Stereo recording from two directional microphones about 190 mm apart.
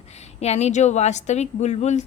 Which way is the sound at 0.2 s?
35° left (ahead or behind).